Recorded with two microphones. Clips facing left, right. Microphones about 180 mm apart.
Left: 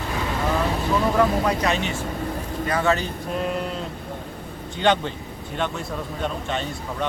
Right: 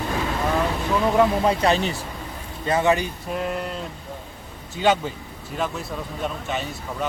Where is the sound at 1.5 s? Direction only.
35° right (ahead or behind).